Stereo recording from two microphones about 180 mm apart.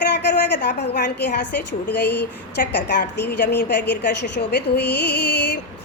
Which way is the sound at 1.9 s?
65° left (ahead or behind).